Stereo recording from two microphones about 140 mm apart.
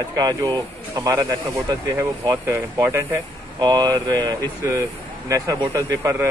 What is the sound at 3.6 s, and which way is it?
Speech, 30° right (ahead or behind).